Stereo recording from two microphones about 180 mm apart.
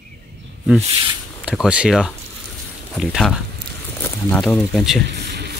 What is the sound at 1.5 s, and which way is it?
Speech, 5° right (ahead or behind).